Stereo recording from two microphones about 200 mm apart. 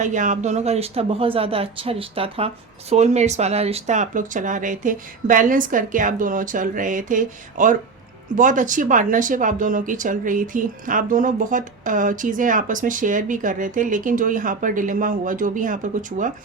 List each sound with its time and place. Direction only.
0.0 s speech: 40° right (ahead or behind)